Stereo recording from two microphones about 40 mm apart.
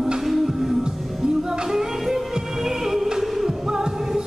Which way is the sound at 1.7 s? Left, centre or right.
Centre.